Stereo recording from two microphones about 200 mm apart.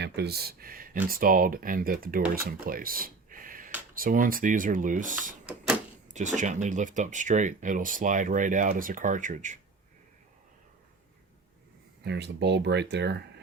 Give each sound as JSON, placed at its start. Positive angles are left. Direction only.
{"t": 0.0, "sound": "speech", "side_deg": -55}
{"t": 12.0, "sound": "speech", "side_deg": -55}